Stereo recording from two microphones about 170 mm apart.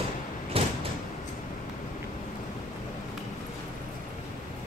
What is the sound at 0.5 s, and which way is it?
Door, 35° right (ahead or behind).